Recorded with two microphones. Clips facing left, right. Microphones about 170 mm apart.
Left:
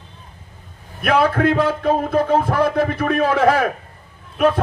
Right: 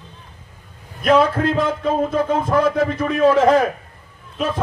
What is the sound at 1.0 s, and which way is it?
Speech, 60° left (ahead or behind).